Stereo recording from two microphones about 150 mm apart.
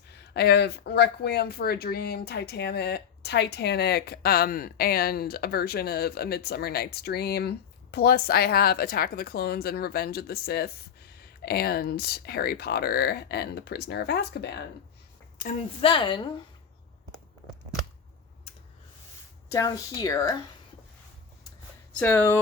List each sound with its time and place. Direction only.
0.1 s speech: 90° left
15.8 s a woman's voice: 35° left (ahead or behind)
19.5 s speech: 20° left (ahead or behind)
21.9 s speech: 15° left (ahead or behind)